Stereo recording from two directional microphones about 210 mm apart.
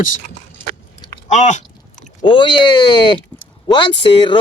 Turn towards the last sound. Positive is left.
turn(degrees=25)  # may be behind; listen again after turning